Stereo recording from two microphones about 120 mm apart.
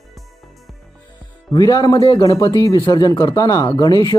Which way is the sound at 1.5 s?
35° left (ahead or behind).